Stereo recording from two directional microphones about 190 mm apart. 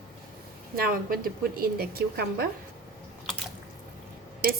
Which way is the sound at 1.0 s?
50° right (ahead or behind).